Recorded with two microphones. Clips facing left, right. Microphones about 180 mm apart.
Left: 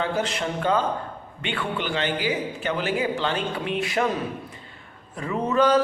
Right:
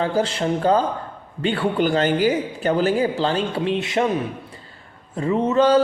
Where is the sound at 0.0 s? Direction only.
30° right (ahead or behind).